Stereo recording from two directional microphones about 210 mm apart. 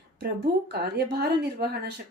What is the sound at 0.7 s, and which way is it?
Speech, 50° right (ahead or behind).